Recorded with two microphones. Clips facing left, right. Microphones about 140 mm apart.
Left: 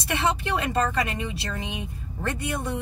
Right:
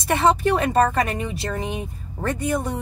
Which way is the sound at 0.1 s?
45° right (ahead or behind).